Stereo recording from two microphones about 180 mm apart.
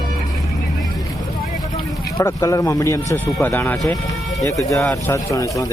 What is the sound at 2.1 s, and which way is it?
Speech, 20° left (ahead or behind).